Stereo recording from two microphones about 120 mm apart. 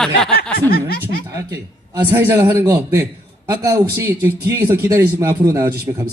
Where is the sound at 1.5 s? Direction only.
30° right (ahead or behind).